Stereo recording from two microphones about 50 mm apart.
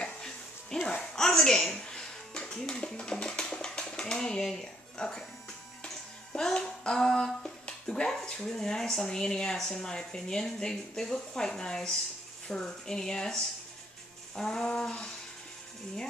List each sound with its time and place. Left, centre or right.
0.0 s music: centre
6.3 s speech: centre
14.3 s music: centre
14.8 s speech: centre